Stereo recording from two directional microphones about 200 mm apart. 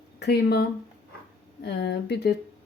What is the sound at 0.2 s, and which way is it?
Cutlery, 55° left (ahead or behind).